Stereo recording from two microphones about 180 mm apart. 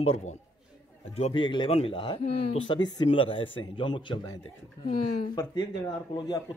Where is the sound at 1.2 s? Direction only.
30° left (ahead or behind).